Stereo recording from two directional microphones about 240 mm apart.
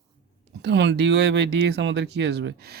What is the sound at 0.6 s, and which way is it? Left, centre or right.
Speech, right.